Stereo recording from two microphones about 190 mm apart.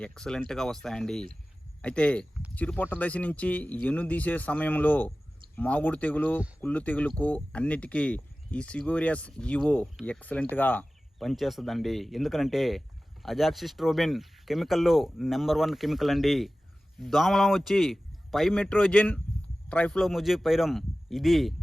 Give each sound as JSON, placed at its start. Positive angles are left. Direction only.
{"t": 0.0, "sound": "speech", "side_deg": 5}